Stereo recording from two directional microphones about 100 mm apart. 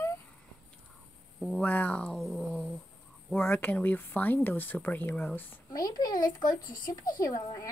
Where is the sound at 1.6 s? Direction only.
15° left (ahead or behind).